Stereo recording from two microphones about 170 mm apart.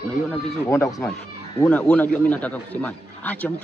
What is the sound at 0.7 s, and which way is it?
A man's voice, 15° left (ahead or behind).